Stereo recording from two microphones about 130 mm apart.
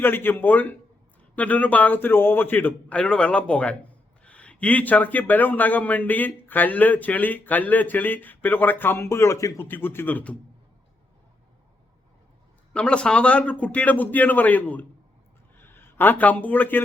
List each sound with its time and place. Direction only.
0.0 s speech: 15° left (ahead or behind)
12.7 s speech: 10° left (ahead or behind)